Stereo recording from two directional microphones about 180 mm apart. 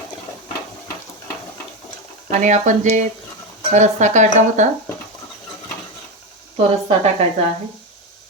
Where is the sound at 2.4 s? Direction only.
40° right (ahead or behind).